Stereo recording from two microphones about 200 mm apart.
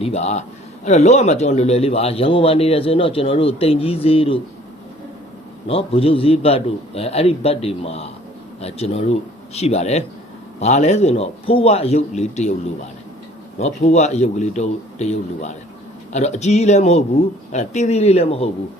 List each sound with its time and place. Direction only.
0.0 s a man's voice: 35° left (ahead or behind)
5.6 s a man's voice: 30° left (ahead or behind)
13.6 s a man's voice: 35° left (ahead or behind)